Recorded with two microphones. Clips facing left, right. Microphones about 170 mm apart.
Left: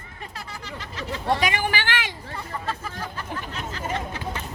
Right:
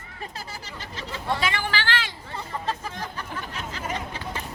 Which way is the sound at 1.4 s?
15° left (ahead or behind).